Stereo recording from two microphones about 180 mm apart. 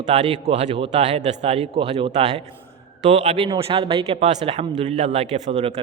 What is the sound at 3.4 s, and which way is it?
A man's voice, 30° right (ahead or behind).